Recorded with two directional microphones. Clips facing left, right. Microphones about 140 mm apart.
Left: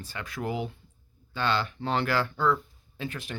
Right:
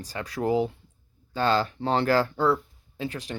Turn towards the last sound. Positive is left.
turn(degrees=-35)  # may be behind; listen again after turning